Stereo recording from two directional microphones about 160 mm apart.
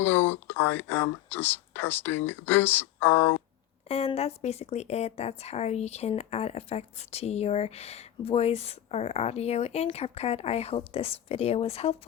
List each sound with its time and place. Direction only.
0.0 s speech: 15° left (ahead or behind)
3.8 s speech: 40° left (ahead or behind)